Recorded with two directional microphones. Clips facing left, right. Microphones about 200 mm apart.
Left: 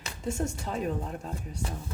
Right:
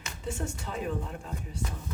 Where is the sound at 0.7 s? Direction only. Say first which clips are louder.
Left 1 dB; 40° left (ahead or behind).